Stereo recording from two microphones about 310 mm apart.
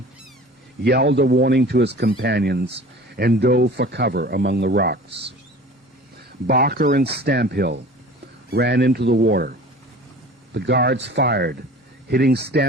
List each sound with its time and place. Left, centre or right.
0.9 s speech: right
6.5 s speech: right